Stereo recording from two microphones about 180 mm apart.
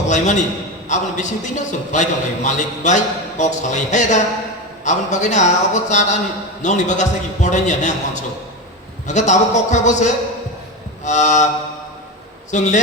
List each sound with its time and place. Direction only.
0.1 s a man's voice: 40° left (ahead or behind)
12.5 s a man's voice: 40° left (ahead or behind)